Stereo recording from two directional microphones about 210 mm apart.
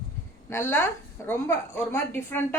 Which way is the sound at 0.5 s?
10° left (ahead or behind).